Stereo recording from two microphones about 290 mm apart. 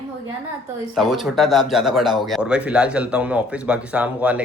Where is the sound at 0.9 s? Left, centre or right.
Centre.